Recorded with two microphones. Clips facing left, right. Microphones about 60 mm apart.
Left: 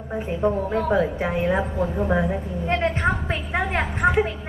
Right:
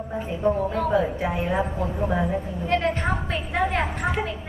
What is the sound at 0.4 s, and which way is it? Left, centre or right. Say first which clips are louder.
A woman's voice: even; left.